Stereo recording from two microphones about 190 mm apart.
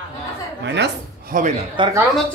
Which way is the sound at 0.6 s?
65° right (ahead or behind).